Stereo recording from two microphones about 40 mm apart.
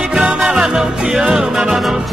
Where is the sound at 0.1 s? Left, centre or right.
Centre.